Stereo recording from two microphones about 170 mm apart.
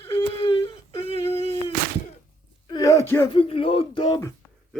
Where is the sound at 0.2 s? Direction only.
35° left (ahead or behind).